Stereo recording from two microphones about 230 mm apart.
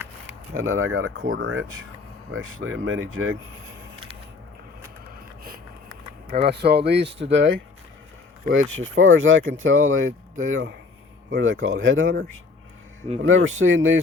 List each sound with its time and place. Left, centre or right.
0.5 s speech: right
6.2 s speech: right
13.2 s speech: right